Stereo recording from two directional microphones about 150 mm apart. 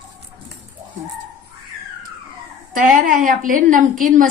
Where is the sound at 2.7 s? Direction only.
65° right (ahead or behind).